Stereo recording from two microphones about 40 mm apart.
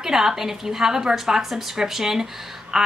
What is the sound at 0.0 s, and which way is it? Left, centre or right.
A woman's voice, centre.